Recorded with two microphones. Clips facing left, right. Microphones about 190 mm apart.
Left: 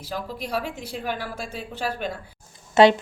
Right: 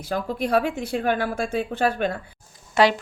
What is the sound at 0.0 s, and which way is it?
Speech, 55° right (ahead or behind).